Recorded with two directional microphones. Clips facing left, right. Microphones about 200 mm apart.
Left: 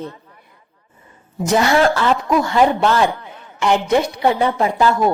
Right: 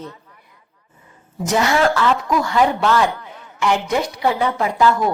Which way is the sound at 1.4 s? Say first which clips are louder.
Left 2 dB; 30° left (ahead or behind).